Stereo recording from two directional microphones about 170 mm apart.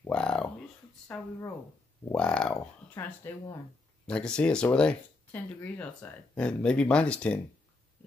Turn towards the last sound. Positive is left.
turn(degrees=5)  # may be behind; listen again after turning